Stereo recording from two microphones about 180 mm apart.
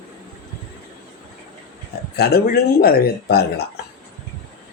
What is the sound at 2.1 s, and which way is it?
Speech, 60° left (ahead or behind).